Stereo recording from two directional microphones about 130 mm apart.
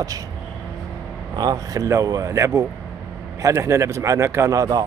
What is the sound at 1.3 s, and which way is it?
Speech, 30° right (ahead or behind).